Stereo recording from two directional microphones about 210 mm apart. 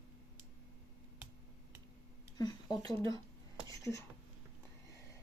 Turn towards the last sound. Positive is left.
turn(degrees=15)  # may be behind; listen again after turning